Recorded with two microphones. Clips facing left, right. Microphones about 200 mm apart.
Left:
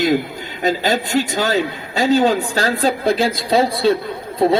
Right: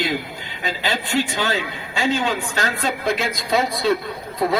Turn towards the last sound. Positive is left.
turn(degrees=30)  # may be behind; listen again after turning